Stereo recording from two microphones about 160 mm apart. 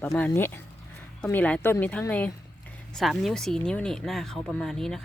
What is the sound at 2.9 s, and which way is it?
Speech, centre (ahead or behind).